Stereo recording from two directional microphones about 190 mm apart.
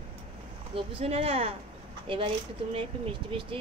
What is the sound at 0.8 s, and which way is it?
Speech, 30° right (ahead or behind).